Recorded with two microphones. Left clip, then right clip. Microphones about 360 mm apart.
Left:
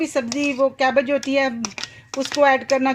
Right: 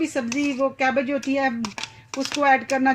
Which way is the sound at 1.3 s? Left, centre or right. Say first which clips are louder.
Left 3 dB; left.